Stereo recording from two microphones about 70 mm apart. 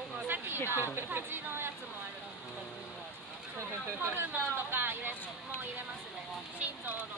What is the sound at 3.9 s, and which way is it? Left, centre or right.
Speech, right.